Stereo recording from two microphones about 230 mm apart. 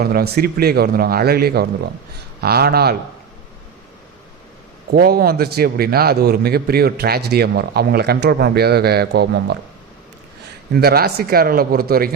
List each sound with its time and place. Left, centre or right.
0.0 s a man's voice: right
4.9 s a man's voice: right
10.8 s speech: right